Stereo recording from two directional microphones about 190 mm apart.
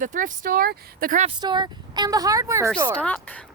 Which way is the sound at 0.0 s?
45° right (ahead or behind).